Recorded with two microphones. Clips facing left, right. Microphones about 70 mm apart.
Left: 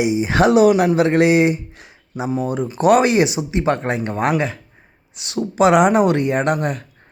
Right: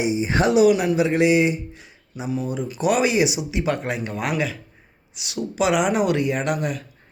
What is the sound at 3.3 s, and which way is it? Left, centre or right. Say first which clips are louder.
Speech: left 5 dB; left.